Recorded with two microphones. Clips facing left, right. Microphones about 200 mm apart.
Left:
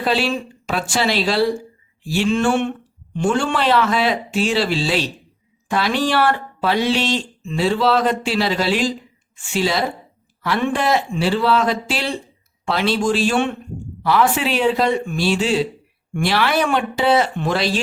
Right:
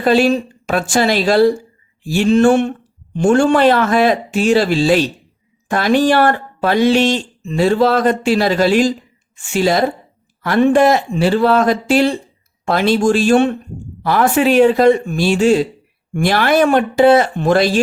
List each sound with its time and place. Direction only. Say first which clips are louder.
0.0 s speech: right 7 dB; 50° right (ahead or behind)